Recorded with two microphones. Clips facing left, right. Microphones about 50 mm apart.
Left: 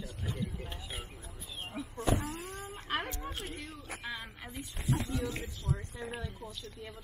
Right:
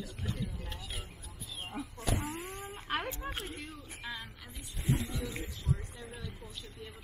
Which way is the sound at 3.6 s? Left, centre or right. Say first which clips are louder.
Even; centre.